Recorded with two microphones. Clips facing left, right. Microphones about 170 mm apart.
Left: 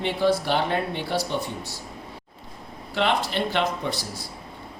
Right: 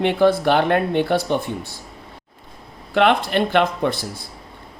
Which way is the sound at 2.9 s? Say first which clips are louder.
Right 7 dB; 60° right (ahead or behind).